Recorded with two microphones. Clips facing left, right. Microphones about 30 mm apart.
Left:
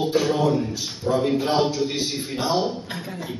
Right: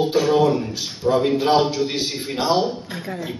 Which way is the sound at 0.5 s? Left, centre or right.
Centre.